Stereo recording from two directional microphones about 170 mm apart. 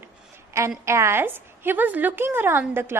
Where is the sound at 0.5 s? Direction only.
20° right (ahead or behind).